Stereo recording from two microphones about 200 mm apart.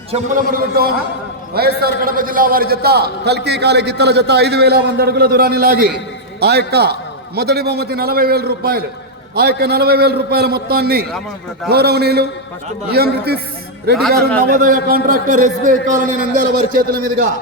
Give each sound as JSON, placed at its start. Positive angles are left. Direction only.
{"t": 0.1, "sound": "a man's voice", "side_deg": -45}
{"t": 14.4, "sound": "a man's voice", "side_deg": -45}